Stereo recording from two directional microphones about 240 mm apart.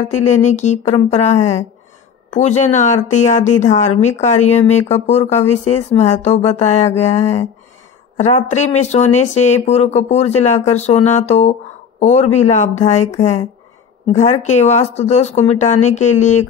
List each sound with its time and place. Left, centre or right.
0.1 s speech: left